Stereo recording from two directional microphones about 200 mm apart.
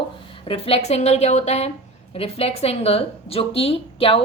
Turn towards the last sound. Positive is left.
turn(degrees=30)  # may be behind; listen again after turning